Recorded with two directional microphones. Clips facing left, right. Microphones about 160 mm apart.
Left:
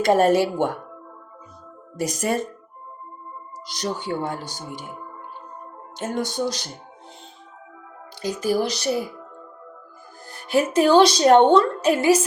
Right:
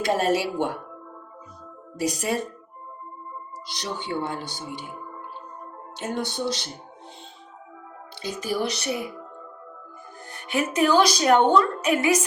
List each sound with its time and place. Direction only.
0.0 s speech: 50° left (ahead or behind)
2.0 s speech: 50° left (ahead or behind)
3.8 s speech: 40° left (ahead or behind)
6.0 s speech: 45° left (ahead or behind)
8.2 s a woman's voice: 35° left (ahead or behind)
10.3 s a woman's voice: 35° left (ahead or behind)